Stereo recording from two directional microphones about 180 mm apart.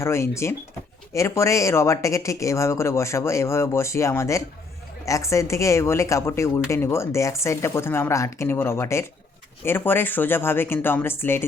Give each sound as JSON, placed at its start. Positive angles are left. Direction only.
{"t": 0.0, "sound": "a woman's voice", "side_deg": 15}